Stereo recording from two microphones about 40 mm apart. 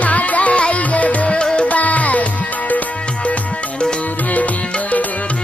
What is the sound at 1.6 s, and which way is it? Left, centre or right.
Music, left.